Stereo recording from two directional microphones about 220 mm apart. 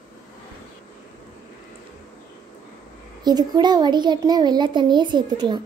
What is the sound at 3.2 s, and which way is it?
A child's voice, 20° right (ahead or behind).